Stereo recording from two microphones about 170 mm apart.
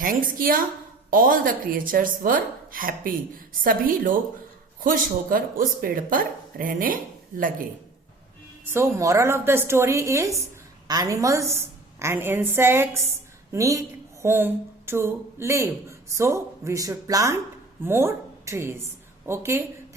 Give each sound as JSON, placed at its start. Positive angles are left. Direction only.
{"t": 0.0, "sound": "speech", "side_deg": -55}
{"t": 8.7, "sound": "a woman's voice", "side_deg": -15}